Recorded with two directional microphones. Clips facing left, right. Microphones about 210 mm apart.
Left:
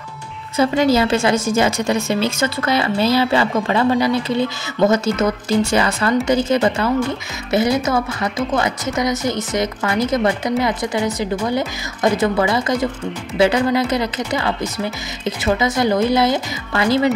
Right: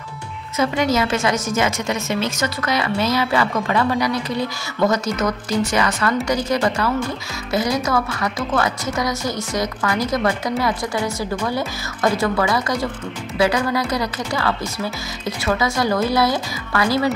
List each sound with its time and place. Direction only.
0.6 s a woman's voice: 30° left (ahead or behind)